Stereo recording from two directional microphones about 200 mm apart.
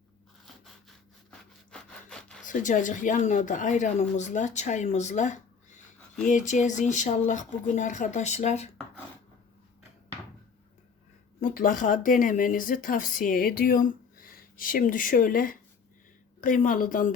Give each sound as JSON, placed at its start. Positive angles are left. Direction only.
{"t": 1.3, "sound": "wood", "side_deg": 5}
{"t": 2.5, "sound": "speech", "side_deg": 40}
{"t": 11.3, "sound": "speech", "side_deg": 40}